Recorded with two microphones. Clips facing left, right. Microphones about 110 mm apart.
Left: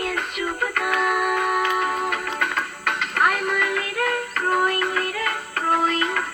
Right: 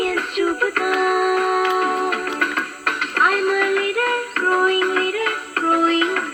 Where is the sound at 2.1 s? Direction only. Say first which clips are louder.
Right 3 dB; 60° right (ahead or behind).